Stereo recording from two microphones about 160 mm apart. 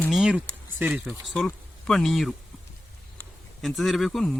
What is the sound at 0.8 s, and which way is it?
Speech, 10° right (ahead or behind).